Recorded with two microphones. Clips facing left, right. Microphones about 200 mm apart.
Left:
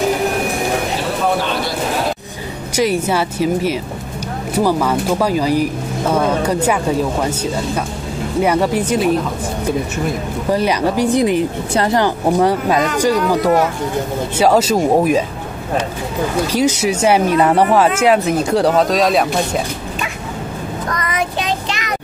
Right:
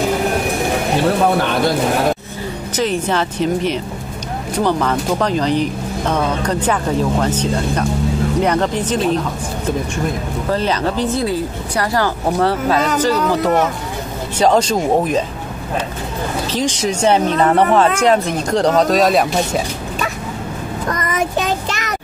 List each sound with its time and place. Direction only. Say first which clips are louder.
2.7 s speech: left 2 dB; 10° left (ahead or behind)
10.5 s speech: left 3 dB; 10° left (ahead or behind)
16.5 s speech: left 2 dB; 10° left (ahead or behind)
21.0 s child singing: right 3 dB; 45° right (ahead or behind)